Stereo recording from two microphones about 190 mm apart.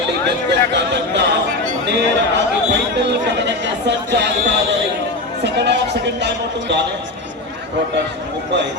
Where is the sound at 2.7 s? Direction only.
65° right (ahead or behind).